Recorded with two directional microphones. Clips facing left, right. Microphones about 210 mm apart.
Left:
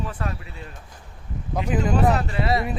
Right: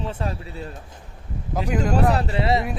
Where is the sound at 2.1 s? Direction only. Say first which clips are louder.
Right 2 dB; 30° right (ahead or behind).